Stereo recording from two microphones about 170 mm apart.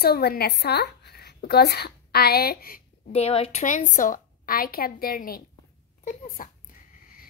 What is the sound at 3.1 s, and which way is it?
A woman's voice, 35° left (ahead or behind).